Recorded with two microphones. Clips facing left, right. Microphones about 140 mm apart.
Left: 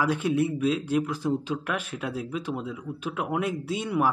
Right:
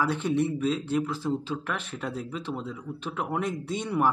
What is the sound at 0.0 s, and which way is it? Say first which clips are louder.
Speech: left 1 dB; 10° left (ahead or behind).